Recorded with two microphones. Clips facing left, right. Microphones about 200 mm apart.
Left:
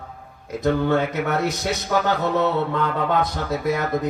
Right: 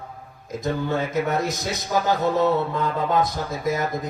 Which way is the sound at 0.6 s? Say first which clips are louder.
Left 5 dB; 65° left (ahead or behind).